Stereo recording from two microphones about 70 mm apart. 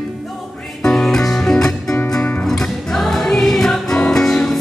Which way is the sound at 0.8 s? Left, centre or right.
Centre.